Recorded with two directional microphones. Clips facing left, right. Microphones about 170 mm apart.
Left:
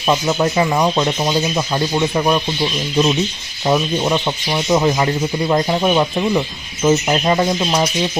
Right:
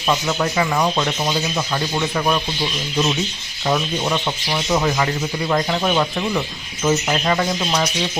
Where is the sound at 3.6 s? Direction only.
15° left (ahead or behind).